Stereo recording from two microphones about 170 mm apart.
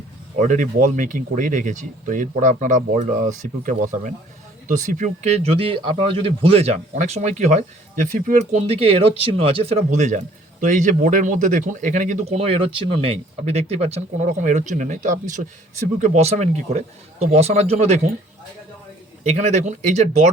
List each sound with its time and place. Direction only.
0.3 s speech: 50° right (ahead or behind)
19.2 s speech: 40° right (ahead or behind)